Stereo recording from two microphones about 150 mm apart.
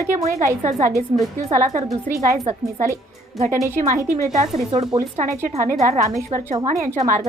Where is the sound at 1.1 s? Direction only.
45° right (ahead or behind).